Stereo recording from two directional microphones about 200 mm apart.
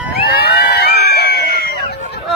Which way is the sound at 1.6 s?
50° left (ahead or behind).